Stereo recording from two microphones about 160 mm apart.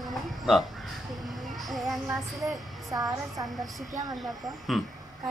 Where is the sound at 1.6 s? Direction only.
Centre (ahead or behind).